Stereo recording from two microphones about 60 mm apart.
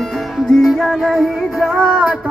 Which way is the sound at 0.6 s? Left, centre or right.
Centre.